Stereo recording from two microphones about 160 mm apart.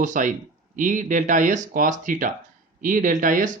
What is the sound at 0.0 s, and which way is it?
Speech, 55° right (ahead or behind).